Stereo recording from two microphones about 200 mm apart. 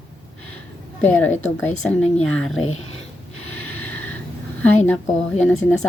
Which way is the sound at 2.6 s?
90° left.